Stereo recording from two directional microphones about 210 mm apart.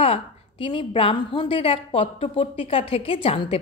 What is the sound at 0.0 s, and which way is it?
A woman's voice, 25° left (ahead or behind).